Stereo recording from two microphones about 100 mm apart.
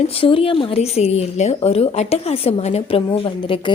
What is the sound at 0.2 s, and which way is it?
A woman's voice, 65° left (ahead or behind).